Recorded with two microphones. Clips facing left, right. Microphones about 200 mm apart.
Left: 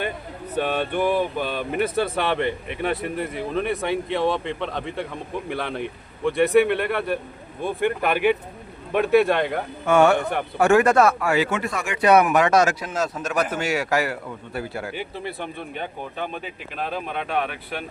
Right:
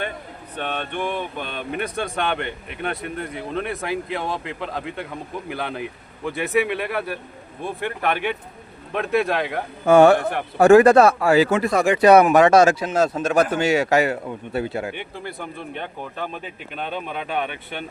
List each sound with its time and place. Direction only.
0.5 s speech: 5° left (ahead or behind)
9.8 s speech: 35° right (ahead or behind)
14.9 s speech: centre (ahead or behind)